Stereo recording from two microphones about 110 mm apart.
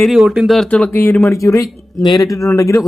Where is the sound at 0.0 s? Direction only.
5° right (ahead or behind).